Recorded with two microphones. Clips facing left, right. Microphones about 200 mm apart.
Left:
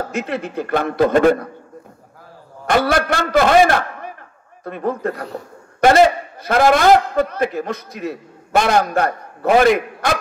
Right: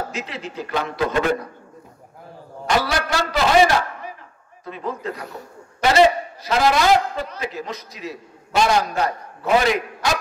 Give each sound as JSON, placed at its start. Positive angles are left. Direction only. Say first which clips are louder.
{"t": 0.1, "sound": "a man's voice", "louder": "left 7 dB", "side_deg": 55}
{"t": 2.6, "sound": "a man's voice", "louder": "left 5 dB", "side_deg": 55}
{"t": 6.4, "sound": "a man's voice", "louder": "left 5 dB", "side_deg": 55}